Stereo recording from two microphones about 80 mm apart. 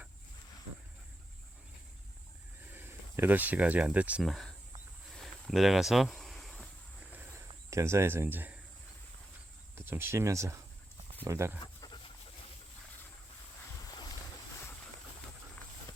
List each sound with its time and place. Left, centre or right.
2.7 s speech: right
4.2 s speech: centre
5.1 s a sound: centre
7.7 s speech: right
9.7 s speech: right
11.6 s dog: left